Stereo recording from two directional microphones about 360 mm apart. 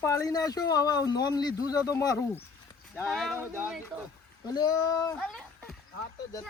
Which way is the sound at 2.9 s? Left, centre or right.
Centre.